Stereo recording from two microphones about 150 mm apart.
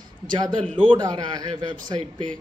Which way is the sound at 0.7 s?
30° right (ahead or behind).